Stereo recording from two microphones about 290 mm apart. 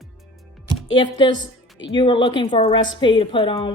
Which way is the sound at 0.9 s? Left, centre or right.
Centre.